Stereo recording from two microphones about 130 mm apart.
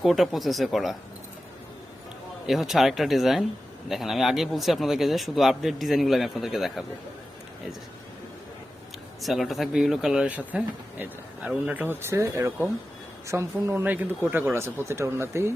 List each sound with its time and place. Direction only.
0.0 s speech: centre (ahead or behind)
2.5 s speech: centre (ahead or behind)
9.2 s speech: centre (ahead or behind); by 15.5 s 20° right (ahead or behind)